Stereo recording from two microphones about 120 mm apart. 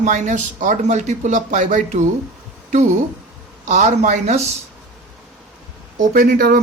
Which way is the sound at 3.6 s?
85° right.